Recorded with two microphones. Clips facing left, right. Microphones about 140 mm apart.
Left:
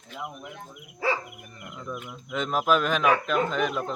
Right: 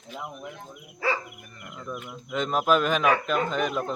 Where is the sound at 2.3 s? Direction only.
Centre (ahead or behind).